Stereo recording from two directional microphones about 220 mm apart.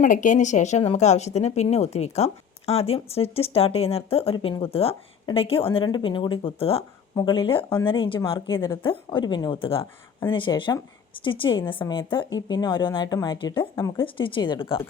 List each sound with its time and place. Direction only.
0.0 s speech: 35° left (ahead or behind)